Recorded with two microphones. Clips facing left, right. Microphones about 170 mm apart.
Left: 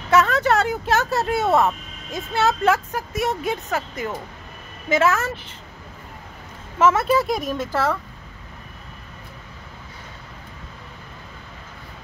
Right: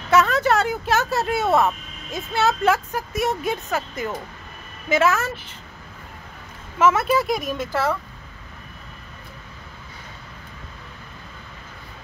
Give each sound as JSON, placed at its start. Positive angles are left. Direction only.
{"t": 0.1, "sound": "speech", "side_deg": 20}
{"t": 6.8, "sound": "speech", "side_deg": 25}
{"t": 7.5, "sound": "speech", "side_deg": 0}